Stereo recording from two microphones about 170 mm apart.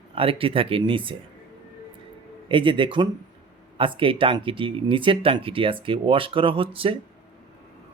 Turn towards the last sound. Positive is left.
turn(degrees=-30)  # may be behind; listen again after turning